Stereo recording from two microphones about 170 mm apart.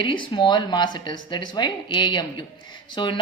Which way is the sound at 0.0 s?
30° left (ahead or behind).